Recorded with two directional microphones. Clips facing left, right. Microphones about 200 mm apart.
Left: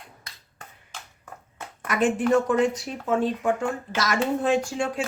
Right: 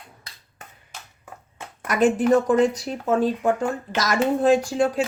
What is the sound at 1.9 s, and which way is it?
Speech, 40° right (ahead or behind).